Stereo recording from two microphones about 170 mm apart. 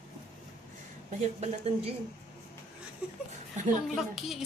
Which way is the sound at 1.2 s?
40° right (ahead or behind).